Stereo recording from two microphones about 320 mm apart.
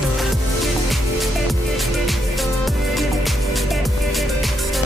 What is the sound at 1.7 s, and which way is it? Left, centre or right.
Music, centre.